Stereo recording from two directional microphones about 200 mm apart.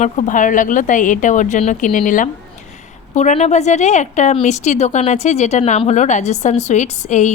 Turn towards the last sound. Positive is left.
turn(degrees=35)  # may be behind; listen again after turning